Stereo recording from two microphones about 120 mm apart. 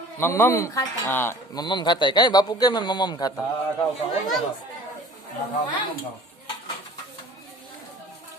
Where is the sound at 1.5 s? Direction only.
35° left (ahead or behind).